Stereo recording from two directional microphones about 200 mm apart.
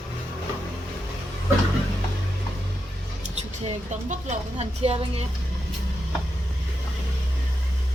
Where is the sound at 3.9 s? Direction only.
35° right (ahead or behind).